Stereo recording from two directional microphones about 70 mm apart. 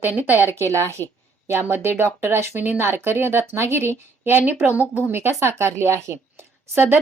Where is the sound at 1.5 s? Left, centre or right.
Right.